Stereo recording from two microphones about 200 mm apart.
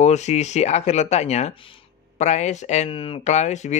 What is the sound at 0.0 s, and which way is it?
Speech, 35° left (ahead or behind).